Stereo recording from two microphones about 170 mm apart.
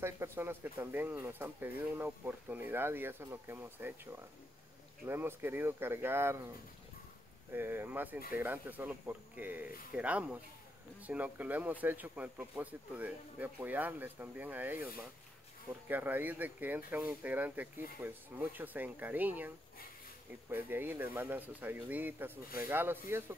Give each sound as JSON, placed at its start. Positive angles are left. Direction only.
{"t": 0.0, "sound": "speech", "side_deg": -15}
{"t": 7.5, "sound": "speech", "side_deg": -10}